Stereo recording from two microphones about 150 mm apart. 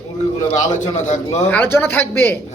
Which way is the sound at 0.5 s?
55° left (ahead or behind).